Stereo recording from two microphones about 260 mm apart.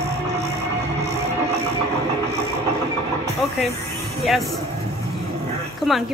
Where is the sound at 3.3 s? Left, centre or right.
Centre.